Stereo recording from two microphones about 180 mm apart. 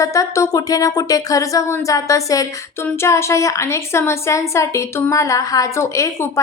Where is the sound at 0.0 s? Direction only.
20° left (ahead or behind).